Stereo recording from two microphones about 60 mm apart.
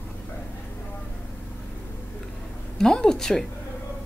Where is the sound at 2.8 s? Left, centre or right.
Centre.